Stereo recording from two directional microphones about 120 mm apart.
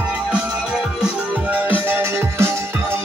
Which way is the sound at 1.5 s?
15° right (ahead or behind).